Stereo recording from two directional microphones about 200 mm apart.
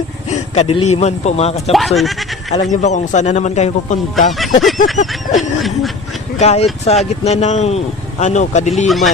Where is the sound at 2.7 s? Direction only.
35° left (ahead or behind).